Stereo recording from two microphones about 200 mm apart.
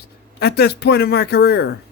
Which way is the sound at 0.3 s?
55° left (ahead or behind).